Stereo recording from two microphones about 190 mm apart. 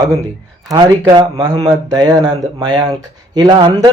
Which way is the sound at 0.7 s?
20° right (ahead or behind).